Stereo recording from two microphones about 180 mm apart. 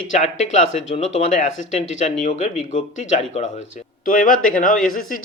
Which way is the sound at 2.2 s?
40° left (ahead or behind).